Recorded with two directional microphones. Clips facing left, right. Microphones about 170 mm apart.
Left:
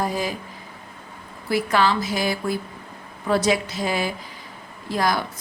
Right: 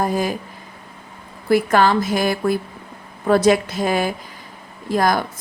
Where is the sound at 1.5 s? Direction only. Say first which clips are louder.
Right 5 dB; 50° right (ahead or behind).